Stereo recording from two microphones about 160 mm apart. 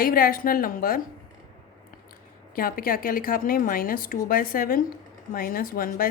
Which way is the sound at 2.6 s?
65° left (ahead or behind).